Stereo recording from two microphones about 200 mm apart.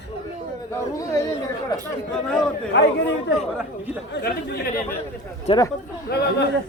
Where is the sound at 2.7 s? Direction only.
60° left (ahead or behind).